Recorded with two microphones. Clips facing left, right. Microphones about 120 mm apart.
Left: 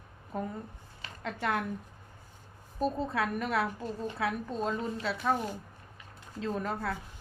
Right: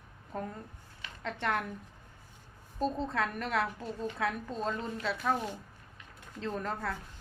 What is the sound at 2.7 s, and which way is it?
A woman's voice, 10° left (ahead or behind).